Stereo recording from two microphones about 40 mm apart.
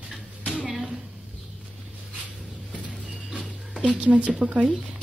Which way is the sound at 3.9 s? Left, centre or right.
Right.